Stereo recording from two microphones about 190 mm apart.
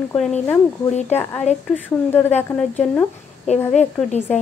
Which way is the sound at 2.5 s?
5° left (ahead or behind).